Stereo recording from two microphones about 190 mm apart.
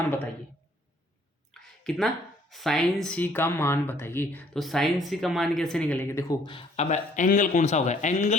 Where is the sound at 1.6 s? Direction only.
5° left (ahead or behind).